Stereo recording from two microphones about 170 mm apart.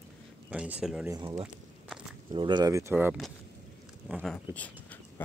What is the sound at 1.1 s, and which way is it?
Speech, 25° right (ahead or behind).